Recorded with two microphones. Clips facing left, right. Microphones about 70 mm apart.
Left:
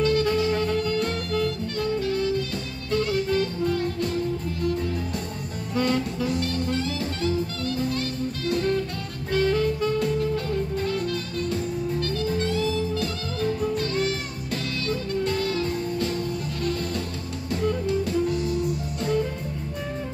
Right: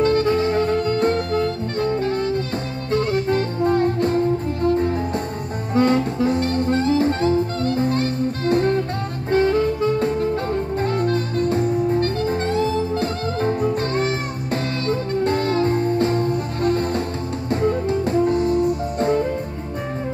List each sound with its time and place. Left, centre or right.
0.0 s music: right